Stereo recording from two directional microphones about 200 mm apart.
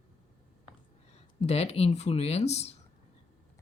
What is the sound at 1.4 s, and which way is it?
Speech, 30° left (ahead or behind).